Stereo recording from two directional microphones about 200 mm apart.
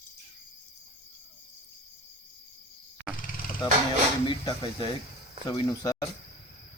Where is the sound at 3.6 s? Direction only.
20° left (ahead or behind).